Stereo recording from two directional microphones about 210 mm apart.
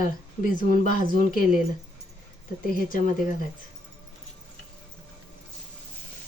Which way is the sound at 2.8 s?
40° left (ahead or behind).